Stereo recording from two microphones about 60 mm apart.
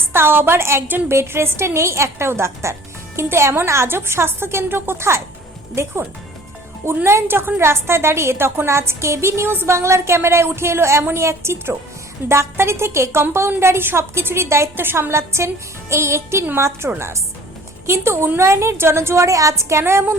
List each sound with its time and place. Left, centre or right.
0.1 s a woman's voice: right
1.1 s a woman's voice: right
6.8 s a woman's voice: right
19.8 s a woman's voice: right